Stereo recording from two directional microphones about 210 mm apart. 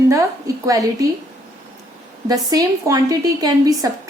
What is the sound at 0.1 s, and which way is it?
Speech, 15° right (ahead or behind).